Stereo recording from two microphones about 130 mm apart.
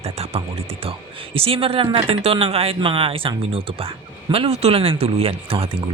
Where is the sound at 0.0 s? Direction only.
55° right (ahead or behind).